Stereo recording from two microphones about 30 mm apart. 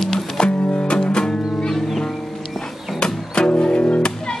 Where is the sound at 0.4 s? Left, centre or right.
Left.